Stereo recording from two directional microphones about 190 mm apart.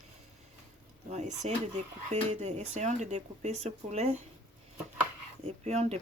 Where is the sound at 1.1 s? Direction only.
35° right (ahead or behind).